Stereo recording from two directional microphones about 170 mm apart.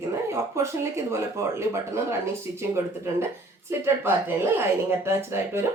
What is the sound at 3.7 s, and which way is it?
A woman's voice, 15° right (ahead or behind).